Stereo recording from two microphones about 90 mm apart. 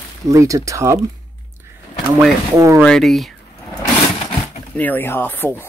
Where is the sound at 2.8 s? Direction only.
5° left (ahead or behind).